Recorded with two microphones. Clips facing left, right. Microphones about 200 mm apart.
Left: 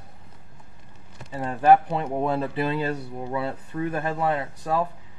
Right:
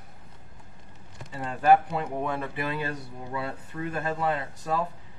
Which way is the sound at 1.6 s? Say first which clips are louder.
Left 3 dB; 25° left (ahead or behind).